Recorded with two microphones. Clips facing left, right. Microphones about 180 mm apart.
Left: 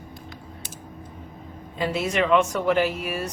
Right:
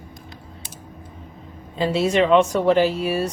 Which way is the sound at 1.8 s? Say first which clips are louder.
Right 5 dB; 30° right (ahead or behind).